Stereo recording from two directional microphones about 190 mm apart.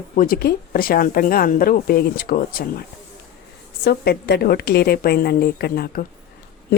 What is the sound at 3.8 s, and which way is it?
A woman's voice, 55° left (ahead or behind).